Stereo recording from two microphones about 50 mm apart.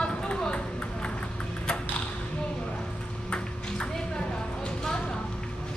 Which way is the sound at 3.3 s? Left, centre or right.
Centre.